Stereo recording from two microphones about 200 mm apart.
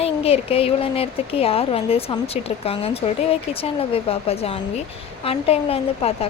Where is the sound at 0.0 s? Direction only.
30° left (ahead or behind).